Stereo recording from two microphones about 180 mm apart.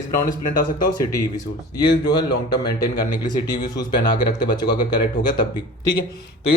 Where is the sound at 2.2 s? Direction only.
65° left (ahead or behind).